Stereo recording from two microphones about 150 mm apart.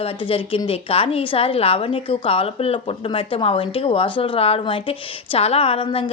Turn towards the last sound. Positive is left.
turn(degrees=35)  # may be behind; listen again after turning